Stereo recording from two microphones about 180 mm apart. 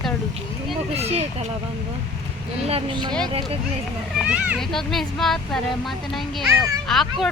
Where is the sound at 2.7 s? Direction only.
25° right (ahead or behind).